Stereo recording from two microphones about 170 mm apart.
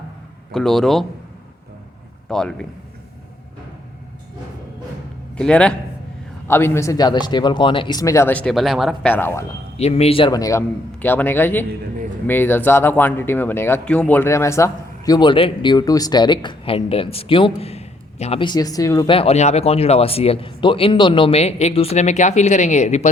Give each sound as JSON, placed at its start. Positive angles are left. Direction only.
{"t": 0.5, "sound": "speech", "side_deg": 0}
{"t": 2.3, "sound": "speech", "side_deg": 5}
{"t": 5.3, "sound": "a man's voice", "side_deg": 5}
{"t": 9.1, "sound": "speech", "side_deg": 10}
{"t": 9.7, "sound": "speech", "side_deg": 35}
{"t": 19.1, "sound": "speech", "side_deg": 35}